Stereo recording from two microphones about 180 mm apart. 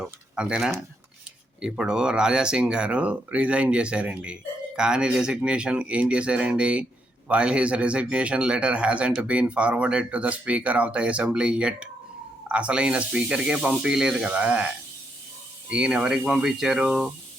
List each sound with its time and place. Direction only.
0.0 s speech: 5° right (ahead or behind)
15.7 s speech: 5° right (ahead or behind)